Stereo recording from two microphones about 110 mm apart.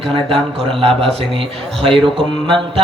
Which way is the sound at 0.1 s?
60° right (ahead or behind).